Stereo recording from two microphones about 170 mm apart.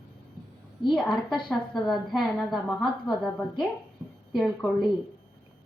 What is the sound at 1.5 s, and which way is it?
A woman's voice, centre (ahead or behind).